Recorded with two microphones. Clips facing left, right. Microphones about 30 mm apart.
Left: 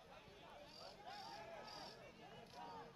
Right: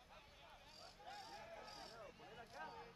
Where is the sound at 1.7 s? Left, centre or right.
Centre.